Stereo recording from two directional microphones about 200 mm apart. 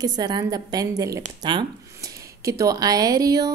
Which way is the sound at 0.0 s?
20° right (ahead or behind).